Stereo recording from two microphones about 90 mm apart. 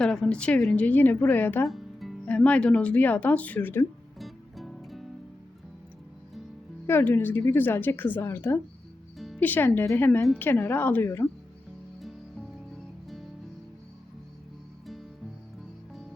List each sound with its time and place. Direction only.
0.0 s a woman's voice: 5° left (ahead or behind)
1.6 s music: centre (ahead or behind)
2.2 s speech: 15° left (ahead or behind)
4.2 s music: centre (ahead or behind)
6.8 s a woman's voice: 25° left (ahead or behind)
9.1 s music: centre (ahead or behind)
9.4 s a woman's voice: 20° left (ahead or behind)
11.9 s music: centre (ahead or behind)